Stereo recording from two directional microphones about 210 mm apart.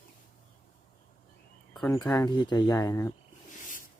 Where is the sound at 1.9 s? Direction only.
15° left (ahead or behind).